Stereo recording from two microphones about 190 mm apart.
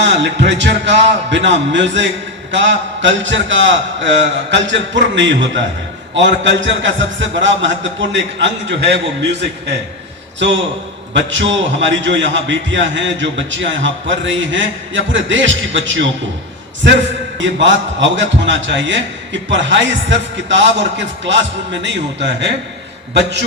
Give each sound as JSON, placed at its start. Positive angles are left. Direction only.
{"t": 0.0, "sound": "a man's voice", "side_deg": -70}
{"t": 11.1, "sound": "a man's voice", "side_deg": -75}
{"t": 17.3, "sound": "a man's voice", "side_deg": -75}